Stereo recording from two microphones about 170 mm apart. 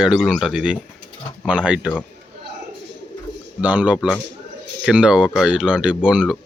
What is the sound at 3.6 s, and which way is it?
Speech, 5° right (ahead or behind).